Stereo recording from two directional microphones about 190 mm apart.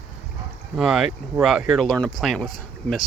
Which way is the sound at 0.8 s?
5° right (ahead or behind).